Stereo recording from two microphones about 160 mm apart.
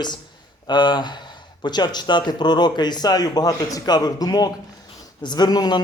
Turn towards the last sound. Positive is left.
turn(degrees=25)  # may be behind; listen again after turning